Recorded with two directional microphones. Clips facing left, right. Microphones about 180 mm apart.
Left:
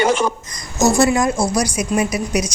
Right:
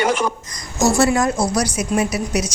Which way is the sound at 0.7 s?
20° left (ahead or behind).